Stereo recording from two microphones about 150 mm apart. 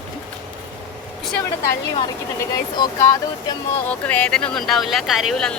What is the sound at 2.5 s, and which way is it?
Speech, 25° left (ahead or behind).